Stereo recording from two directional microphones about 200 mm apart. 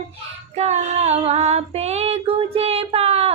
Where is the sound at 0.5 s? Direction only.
35° right (ahead or behind).